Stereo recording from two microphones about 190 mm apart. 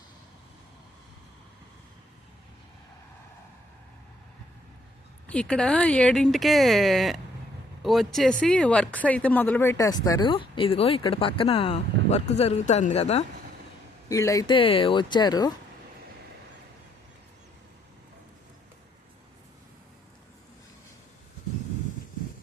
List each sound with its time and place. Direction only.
5.3 s speech: 5° left (ahead or behind); by 13.2 s 35° left (ahead or behind)
14.1 s speech: 15° left (ahead or behind)